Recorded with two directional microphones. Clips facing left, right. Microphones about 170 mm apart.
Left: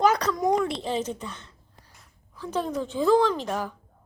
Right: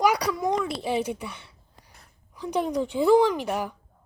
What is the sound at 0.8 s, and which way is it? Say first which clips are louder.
A woman's voice: right 2 dB; 10° right (ahead or behind).